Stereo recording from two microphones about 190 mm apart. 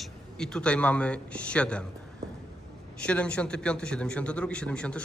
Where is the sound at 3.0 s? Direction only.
5° left (ahead or behind).